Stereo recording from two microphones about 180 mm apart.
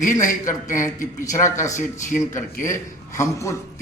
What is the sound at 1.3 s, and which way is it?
Speech, 15° left (ahead or behind).